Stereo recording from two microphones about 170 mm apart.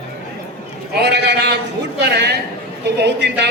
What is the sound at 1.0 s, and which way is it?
A man's voice, 80° right.